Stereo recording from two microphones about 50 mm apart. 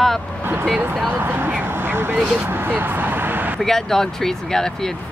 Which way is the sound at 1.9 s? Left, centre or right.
Right.